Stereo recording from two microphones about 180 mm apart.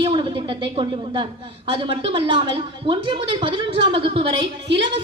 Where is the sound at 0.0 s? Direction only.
25° right (ahead or behind).